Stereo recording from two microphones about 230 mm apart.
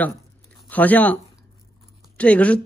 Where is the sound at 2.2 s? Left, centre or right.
Centre.